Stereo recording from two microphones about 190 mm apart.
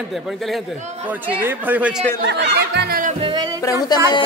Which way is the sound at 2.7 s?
60° right (ahead or behind).